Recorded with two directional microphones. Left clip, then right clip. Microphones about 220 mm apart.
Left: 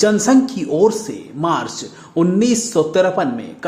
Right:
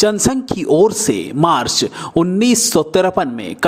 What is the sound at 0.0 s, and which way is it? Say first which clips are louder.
Speech: left 1 dB; 35° right (ahead or behind).